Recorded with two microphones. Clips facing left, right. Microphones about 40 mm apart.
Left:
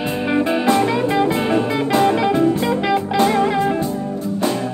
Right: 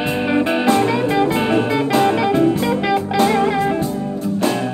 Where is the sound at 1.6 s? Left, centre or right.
Centre.